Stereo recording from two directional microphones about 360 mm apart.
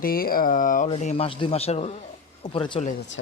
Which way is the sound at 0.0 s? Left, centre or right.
Left.